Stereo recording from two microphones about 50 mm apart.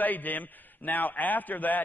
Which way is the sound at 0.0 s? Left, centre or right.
Left.